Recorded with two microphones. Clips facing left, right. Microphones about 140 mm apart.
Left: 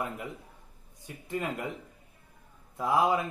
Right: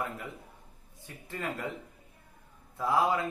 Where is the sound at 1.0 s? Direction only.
20° left (ahead or behind).